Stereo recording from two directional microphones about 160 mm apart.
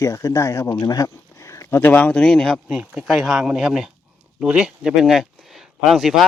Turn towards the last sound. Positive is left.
turn(degrees=0)  # may be behind; listen again after turning